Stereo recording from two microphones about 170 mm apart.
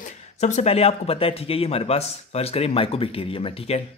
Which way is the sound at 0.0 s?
45° left (ahead or behind).